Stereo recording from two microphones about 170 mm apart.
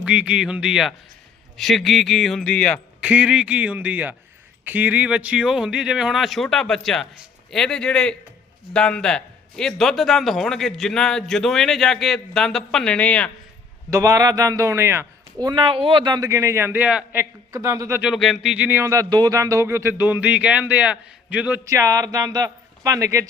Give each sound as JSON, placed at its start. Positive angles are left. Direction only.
{"t": 0.0, "sound": "a man's voice", "side_deg": -5}
{"t": 3.0, "sound": "a man's voice", "side_deg": -5}
{"t": 13.9, "sound": "a man's voice", "side_deg": -20}
{"t": 18.0, "sound": "a man's voice", "side_deg": 0}
{"t": 21.6, "sound": "a man's voice", "side_deg": -20}